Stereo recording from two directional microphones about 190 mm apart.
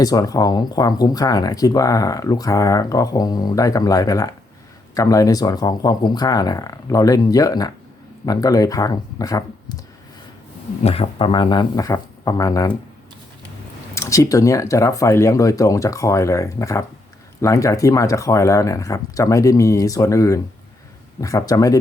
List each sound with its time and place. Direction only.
0.0 s speech: 20° left (ahead or behind)
10.8 s speech: 30° left (ahead or behind)
13.9 s speech: 15° left (ahead or behind)